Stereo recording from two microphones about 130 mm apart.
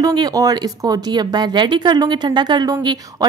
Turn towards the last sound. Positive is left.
turn(degrees=-30)  # may be behind; listen again after turning